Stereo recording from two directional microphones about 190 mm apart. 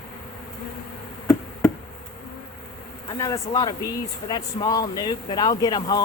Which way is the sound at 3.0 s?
15° left (ahead or behind).